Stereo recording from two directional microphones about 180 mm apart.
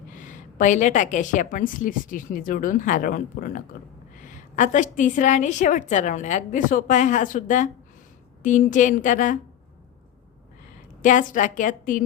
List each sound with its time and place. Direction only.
0.1 s a woman's voice: 45° left (ahead or behind)
11.0 s a woman's voice: 45° left (ahead or behind)